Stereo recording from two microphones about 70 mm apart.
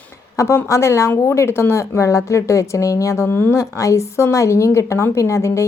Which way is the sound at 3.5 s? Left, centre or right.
Left.